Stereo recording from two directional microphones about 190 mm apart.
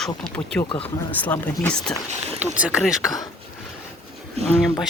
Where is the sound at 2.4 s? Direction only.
5° right (ahead or behind).